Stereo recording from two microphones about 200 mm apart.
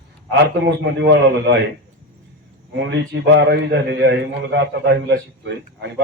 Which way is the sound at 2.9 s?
60° right (ahead or behind).